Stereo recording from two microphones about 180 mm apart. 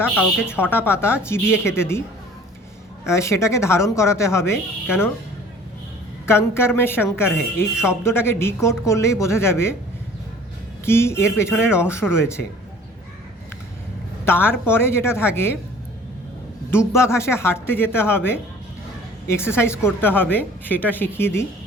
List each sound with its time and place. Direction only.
0.2 s a woman's voice: 10° left (ahead or behind)
3.1 s a woman's voice: 15° left (ahead or behind)
6.2 s a woman's voice: 15° left (ahead or behind)
10.8 s a woman's voice: 15° left (ahead or behind)
14.3 s a woman's voice: 10° left (ahead or behind)
16.7 s a woman's voice: 15° left (ahead or behind)